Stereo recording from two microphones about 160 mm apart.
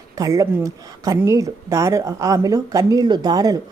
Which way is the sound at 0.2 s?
20° right (ahead or behind).